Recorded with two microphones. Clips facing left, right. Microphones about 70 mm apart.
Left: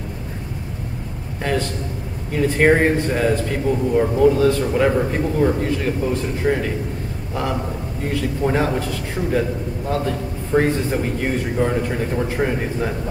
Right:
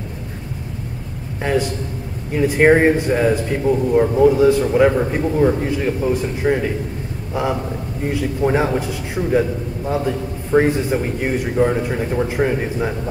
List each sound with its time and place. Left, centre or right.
1.4 s a man's voice: centre